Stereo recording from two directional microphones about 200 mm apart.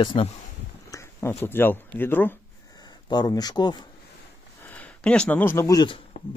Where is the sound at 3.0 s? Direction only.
20° left (ahead or behind).